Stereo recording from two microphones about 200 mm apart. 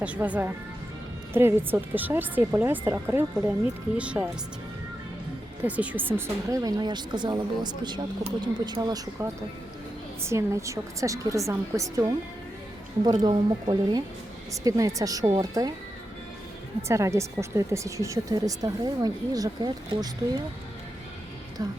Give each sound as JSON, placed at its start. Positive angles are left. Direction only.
{"t": 0.0, "sound": "speech", "side_deg": -5}
{"t": 5.6, "sound": "speech", "side_deg": -5}
{"t": 13.2, "sound": "speech", "side_deg": -20}
{"t": 16.9, "sound": "speech", "side_deg": -15}
{"t": 21.6, "sound": "speech", "side_deg": -15}